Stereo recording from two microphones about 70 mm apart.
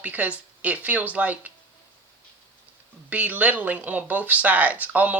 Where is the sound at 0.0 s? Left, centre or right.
Right.